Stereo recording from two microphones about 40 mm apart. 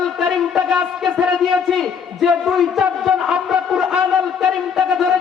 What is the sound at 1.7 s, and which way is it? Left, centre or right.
A man's voice, centre.